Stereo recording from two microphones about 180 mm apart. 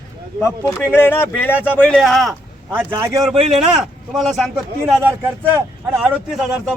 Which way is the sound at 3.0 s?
15° right (ahead or behind).